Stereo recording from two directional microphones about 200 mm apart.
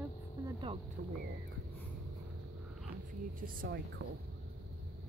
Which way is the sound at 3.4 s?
45° right (ahead or behind).